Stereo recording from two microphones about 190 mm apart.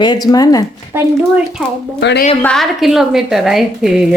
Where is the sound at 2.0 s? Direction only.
65° left (ahead or behind).